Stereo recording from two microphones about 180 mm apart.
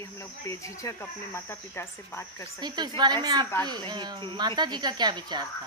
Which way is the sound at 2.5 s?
25° right (ahead or behind).